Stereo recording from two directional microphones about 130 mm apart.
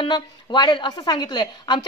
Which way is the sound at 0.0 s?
35° left (ahead or behind).